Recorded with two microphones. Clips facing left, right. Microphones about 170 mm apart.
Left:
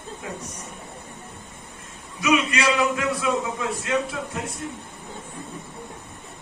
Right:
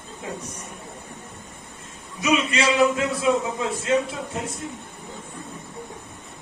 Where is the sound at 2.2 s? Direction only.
25° right (ahead or behind).